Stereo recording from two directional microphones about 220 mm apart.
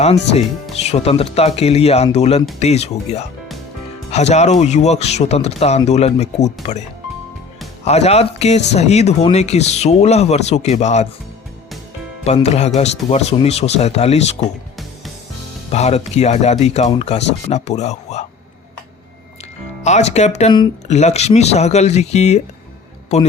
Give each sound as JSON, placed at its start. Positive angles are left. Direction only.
{"t": 0.0, "sound": "speech", "side_deg": 30}
{"t": 7.9, "sound": "speech", "side_deg": 30}
{"t": 12.2, "sound": "speech", "side_deg": 30}
{"t": 15.7, "sound": "speech", "side_deg": 30}
{"t": 19.8, "sound": "speech", "side_deg": 30}